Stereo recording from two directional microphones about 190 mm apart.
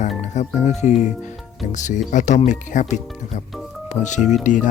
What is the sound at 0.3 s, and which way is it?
Speech, 40° left (ahead or behind).